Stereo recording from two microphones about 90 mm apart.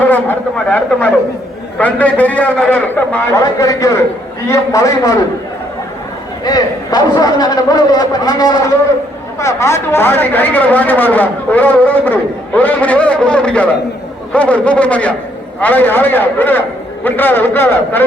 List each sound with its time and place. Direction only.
0.1 s a man's voice: 15° left (ahead or behind)
3.3 s a man's voice: 40° left (ahead or behind)
6.4 s a man's voice: 45° left (ahead or behind)
9.4 s a man's voice: 35° left (ahead or behind)